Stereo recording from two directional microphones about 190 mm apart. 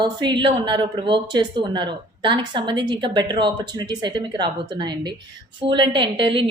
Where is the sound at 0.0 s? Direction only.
25° right (ahead or behind).